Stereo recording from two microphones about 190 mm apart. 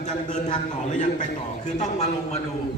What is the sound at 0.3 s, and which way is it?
A man's voice, 40° left (ahead or behind).